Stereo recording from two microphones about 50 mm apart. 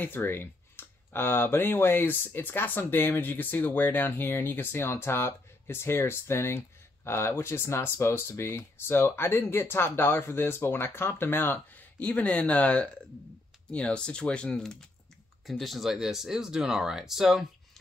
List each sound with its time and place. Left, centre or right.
0.0 s speech: left
4.1 s speech: left
12.0 s speech: left; by 14.8 s centre
15.4 s speech: centre